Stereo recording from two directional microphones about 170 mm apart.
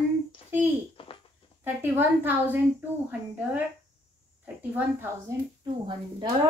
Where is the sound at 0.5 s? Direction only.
10° right (ahead or behind).